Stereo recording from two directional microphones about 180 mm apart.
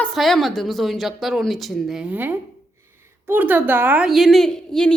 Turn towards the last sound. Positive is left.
turn(degrees=5)  # may be behind; listen again after turning